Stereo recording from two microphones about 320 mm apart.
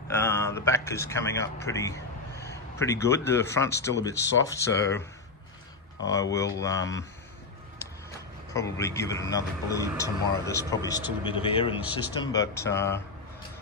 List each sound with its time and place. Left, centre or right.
0.1 s speech: centre
6.1 s speech: centre
8.5 s speech: centre
11.8 s speech: centre
12.2 s speech: centre